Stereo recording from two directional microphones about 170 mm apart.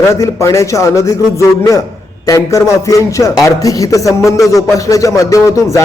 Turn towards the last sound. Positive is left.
turn(degrees=20)  # may be behind; listen again after turning